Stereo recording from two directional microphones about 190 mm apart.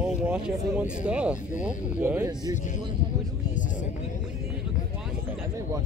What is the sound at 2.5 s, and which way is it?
Speech, 40° left (ahead or behind).